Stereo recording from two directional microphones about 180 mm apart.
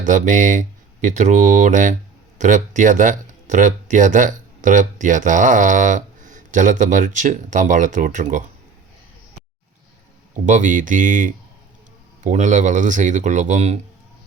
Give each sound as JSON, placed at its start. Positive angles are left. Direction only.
{"t": 0.0, "sound": "speech", "side_deg": -45}
{"t": 10.3, "sound": "speech", "side_deg": -45}